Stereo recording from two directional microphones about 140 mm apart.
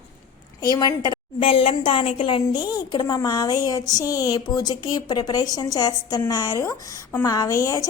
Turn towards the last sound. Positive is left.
turn(degrees=25)  # may be behind; listen again after turning